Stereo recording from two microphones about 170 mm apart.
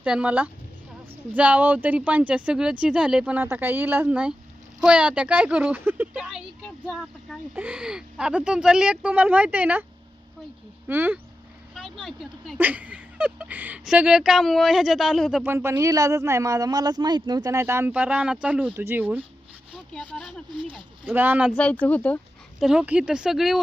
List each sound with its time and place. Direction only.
0.0 s speech: 5° right (ahead or behind)
10.8 s speech: 10° right (ahead or behind)
11.7 s speech: centre (ahead or behind)
15.4 s speech: 15° right (ahead or behind)
19.9 s speech: 5° left (ahead or behind)
21.0 s speech: 10° right (ahead or behind)
21.5 s speech: 10° left (ahead or behind)
22.6 s speech: 5° right (ahead or behind)